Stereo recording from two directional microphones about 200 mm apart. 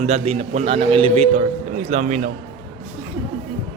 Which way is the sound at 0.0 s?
35° right (ahead or behind).